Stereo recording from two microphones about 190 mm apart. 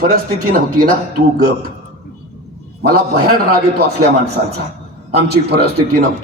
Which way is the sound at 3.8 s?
55° right (ahead or behind).